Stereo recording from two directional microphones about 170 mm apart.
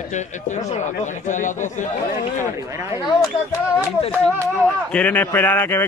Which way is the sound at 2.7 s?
15° right (ahead or behind).